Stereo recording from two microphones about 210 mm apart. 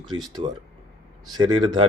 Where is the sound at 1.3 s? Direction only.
20° right (ahead or behind).